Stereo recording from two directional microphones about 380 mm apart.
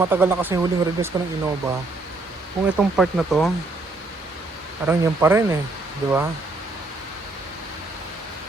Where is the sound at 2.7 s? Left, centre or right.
Centre.